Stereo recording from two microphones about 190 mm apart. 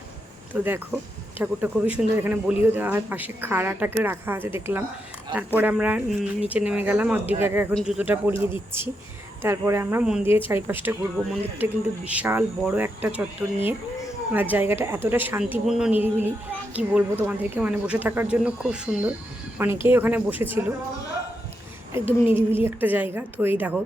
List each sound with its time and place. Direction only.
0.5 s speech: 10° right (ahead or behind)
7.7 s a man's voice: 5° left (ahead or behind)
7.9 s speech: 10° right (ahead or behind)
9.4 s speech: 15° right (ahead or behind)
21.9 s speech: 10° right (ahead or behind)